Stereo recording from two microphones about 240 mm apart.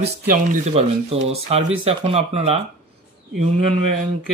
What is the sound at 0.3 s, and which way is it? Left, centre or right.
Speech, right.